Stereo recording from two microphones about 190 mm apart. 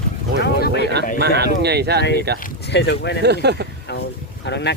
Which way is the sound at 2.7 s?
60° left (ahead or behind).